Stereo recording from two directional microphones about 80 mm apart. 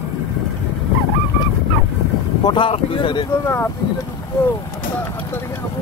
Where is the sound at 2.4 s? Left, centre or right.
Left.